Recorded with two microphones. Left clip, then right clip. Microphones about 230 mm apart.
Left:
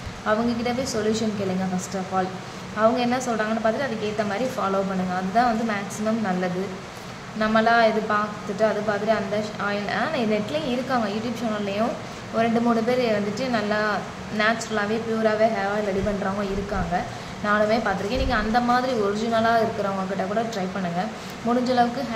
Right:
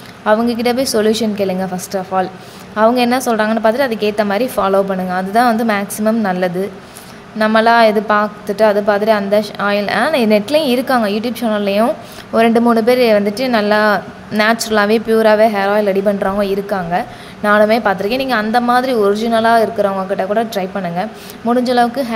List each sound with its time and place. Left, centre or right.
0.2 s a woman's voice: right